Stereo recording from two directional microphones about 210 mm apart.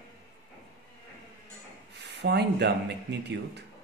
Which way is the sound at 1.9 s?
55° right (ahead or behind).